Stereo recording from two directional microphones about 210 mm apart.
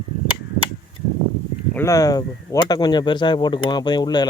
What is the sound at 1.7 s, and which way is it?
Speech, 15° left (ahead or behind).